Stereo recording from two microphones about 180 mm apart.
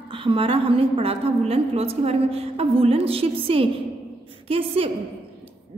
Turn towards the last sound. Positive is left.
turn(degrees=-30)  # may be behind; listen again after turning